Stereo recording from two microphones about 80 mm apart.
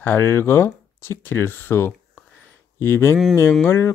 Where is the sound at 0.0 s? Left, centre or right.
Left.